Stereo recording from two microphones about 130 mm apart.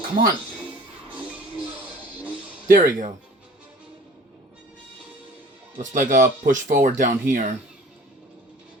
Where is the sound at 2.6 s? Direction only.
90° right.